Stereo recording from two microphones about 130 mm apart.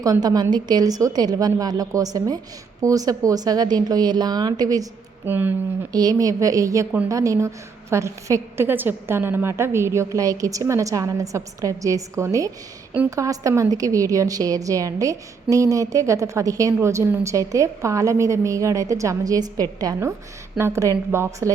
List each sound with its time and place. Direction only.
0.0 s a woman's voice: 30° right (ahead or behind)
5.2 s speech: 15° right (ahead or behind)
5.9 s a woman's voice: 30° right (ahead or behind)